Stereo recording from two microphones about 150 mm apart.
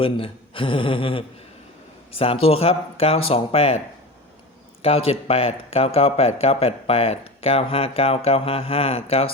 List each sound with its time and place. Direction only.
0.0 s a man's voice: 35° left (ahead or behind)